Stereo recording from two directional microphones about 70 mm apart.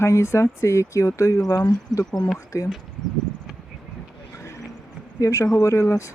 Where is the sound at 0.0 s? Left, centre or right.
Left.